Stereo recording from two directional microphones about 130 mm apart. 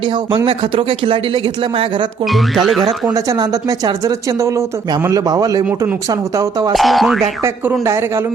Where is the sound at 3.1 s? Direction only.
25° right (ahead or behind).